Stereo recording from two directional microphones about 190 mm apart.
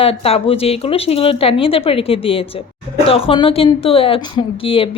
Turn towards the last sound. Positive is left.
turn(degrees=30)  # may be behind; listen again after turning